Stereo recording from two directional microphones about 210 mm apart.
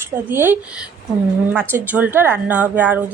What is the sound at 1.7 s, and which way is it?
A woman's voice, 10° right (ahead or behind).